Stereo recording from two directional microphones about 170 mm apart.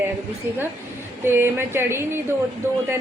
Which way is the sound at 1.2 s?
15° right (ahead or behind).